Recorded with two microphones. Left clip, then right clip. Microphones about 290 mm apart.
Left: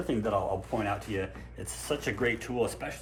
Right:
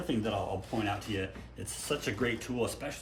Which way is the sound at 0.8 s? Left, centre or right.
Centre.